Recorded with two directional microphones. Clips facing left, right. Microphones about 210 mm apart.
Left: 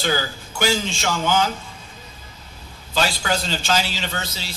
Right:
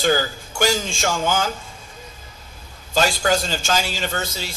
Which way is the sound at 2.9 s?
45° right (ahead or behind).